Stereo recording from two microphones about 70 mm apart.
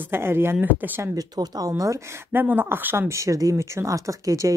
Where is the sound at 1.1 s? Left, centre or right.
Right.